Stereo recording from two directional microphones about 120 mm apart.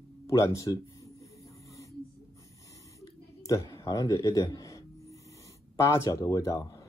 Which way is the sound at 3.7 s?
30° left (ahead or behind).